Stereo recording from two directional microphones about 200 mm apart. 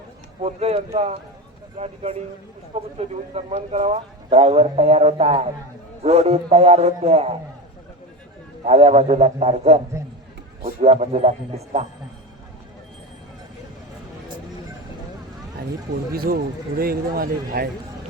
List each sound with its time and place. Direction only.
0.4 s a man's voice: 30° right (ahead or behind)
8.6 s a man's voice: 35° right (ahead or behind)
16.1 s speech: 50° right (ahead or behind)